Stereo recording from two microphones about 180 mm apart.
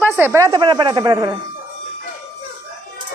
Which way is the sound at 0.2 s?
15° right (ahead or behind).